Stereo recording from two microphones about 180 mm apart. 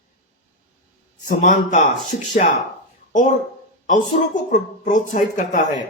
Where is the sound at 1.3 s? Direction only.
45° left (ahead or behind).